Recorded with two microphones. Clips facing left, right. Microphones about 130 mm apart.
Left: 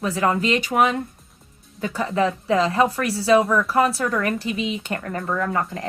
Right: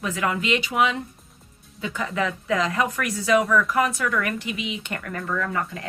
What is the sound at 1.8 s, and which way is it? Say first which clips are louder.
A woman's voice: left 5 dB; 35° left (ahead or behind).